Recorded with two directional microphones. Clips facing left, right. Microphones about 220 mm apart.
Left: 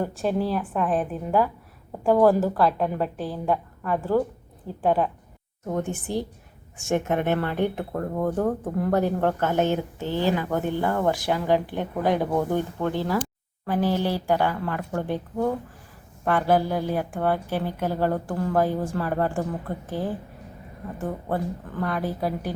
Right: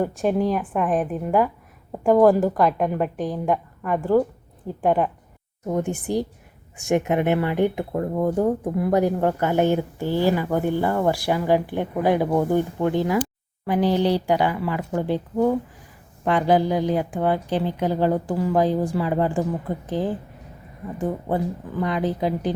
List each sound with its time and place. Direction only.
0.0 s a woman's voice: 15° right (ahead or behind)
0.6 s a woman's voice: centre (ahead or behind)
0.9 s a woman's voice: 15° right (ahead or behind)